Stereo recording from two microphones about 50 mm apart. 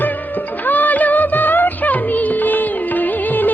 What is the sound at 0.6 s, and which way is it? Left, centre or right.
Music, left.